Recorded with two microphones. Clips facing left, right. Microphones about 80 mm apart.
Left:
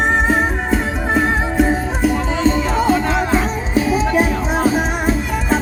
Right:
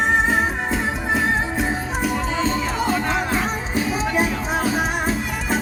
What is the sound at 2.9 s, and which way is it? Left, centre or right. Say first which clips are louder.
Music: left 5 dB; centre.